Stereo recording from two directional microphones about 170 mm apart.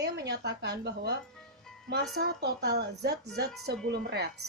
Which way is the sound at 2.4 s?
75° right (ahead or behind).